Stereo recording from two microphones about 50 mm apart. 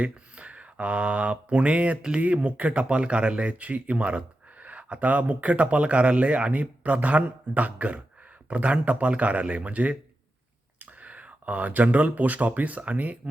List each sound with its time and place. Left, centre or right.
0.0 s speech: right